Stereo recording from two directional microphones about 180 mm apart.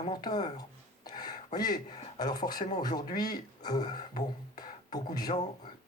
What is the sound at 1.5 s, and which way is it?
Speech, 20° left (ahead or behind).